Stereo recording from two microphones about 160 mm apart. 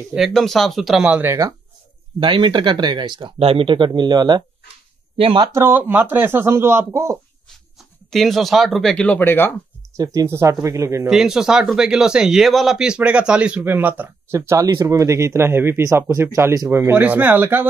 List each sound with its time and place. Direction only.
0.1 s speech: centre (ahead or behind)
2.1 s speech: 30° right (ahead or behind)
5.5 s speech: 15° right (ahead or behind)
8.1 s speech: centre (ahead or behind)
9.9 s speech: 20° right (ahead or behind)
11.1 s speech: 5° right (ahead or behind)